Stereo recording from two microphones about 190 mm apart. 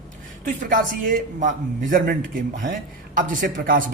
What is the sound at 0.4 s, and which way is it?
A man's voice, 45° right (ahead or behind).